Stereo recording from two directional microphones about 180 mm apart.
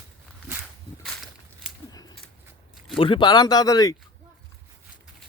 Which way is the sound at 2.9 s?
30° left (ahead or behind).